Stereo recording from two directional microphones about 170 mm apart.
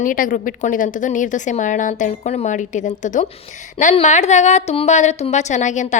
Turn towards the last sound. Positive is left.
turn(degrees=45)  # may be behind; listen again after turning